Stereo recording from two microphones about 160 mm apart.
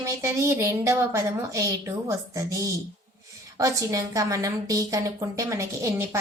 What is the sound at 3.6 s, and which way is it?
A woman's voice, 20° right (ahead or behind).